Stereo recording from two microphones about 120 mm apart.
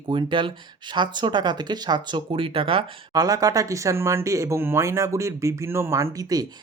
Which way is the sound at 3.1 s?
30° right (ahead or behind).